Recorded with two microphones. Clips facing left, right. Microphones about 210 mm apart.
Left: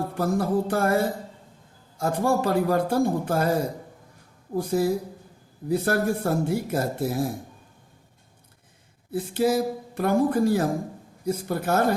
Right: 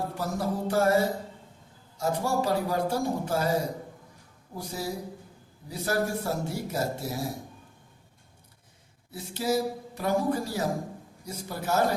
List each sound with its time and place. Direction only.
0.2 s speech: 55° left (ahead or behind)
4.5 s speech: 55° left (ahead or behind)
9.1 s speech: 55° left (ahead or behind)